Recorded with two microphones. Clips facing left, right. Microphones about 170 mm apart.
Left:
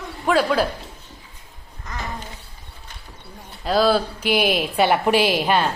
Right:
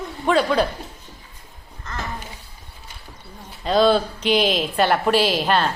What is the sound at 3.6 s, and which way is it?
A woman's voice, 5° left (ahead or behind).